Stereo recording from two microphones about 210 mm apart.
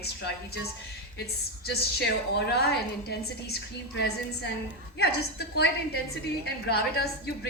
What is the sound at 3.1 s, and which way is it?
A woman's voice, 50° left (ahead or behind).